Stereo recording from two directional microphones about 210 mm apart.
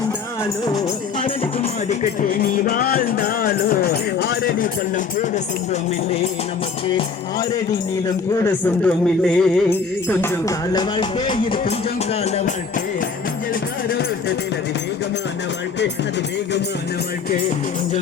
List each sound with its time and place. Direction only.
0.6 s music: 20° left (ahead or behind)
2.3 s music: 45° left (ahead or behind)
8.4 s speech: 10° left (ahead or behind); by 11.6 s 25° left (ahead or behind)
12.2 s music: 30° left (ahead or behind)